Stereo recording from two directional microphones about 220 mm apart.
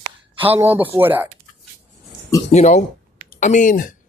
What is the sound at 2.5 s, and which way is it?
Speech, 30° left (ahead or behind).